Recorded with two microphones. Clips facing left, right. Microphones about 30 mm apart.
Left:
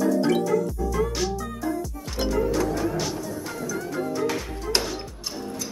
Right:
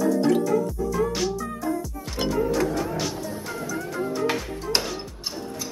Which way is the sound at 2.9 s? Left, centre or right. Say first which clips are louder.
Left 1 dB; centre.